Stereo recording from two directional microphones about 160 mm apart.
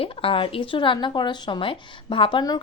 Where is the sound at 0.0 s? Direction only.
35° left (ahead or behind).